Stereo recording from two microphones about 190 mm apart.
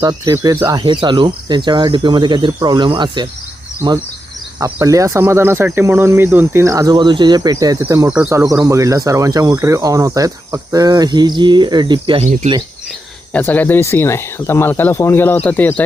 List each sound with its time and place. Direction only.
0.0 s speech: 20° right (ahead or behind)
4.6 s speech: 15° right (ahead or behind)
12.2 s speech: 35° right (ahead or behind)
13.3 s speech: 10° left (ahead or behind)